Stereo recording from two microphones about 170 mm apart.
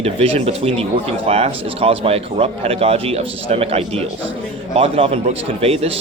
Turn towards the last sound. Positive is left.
turn(degrees=-35)  # may be behind; listen again after turning